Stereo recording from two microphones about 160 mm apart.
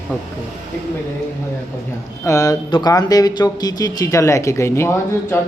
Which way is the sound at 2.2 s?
20° left (ahead or behind).